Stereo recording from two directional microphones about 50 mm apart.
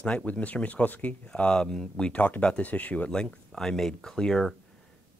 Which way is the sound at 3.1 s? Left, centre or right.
Centre.